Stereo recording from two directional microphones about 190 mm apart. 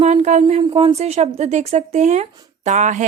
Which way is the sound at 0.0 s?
35° right (ahead or behind).